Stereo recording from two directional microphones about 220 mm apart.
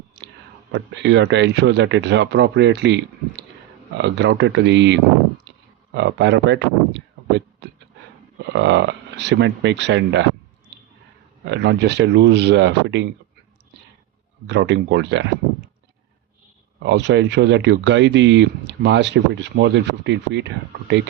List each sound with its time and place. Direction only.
0.7 s speech: 55° right (ahead or behind)
5.5 s a sound: 50° right (ahead or behind)
5.9 s speech: 55° right (ahead or behind)
7.6 s a sound: 50° right (ahead or behind)
8.5 s speech: 55° right (ahead or behind)
11.4 s speech: 55° right (ahead or behind)
14.4 s speech: 55° right (ahead or behind)
16.8 s speech: 50° right (ahead or behind)